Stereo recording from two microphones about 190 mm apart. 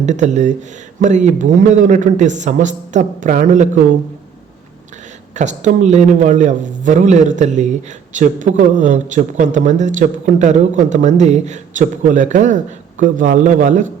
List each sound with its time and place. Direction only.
0.0 s a man's voice: 40° right (ahead or behind)
5.3 s a man's voice: 40° right (ahead or behind)